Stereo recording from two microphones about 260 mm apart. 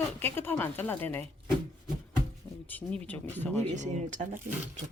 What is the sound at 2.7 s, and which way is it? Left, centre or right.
A woman's voice, centre.